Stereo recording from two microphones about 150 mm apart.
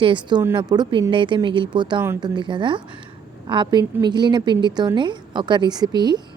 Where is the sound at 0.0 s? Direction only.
30° right (ahead or behind).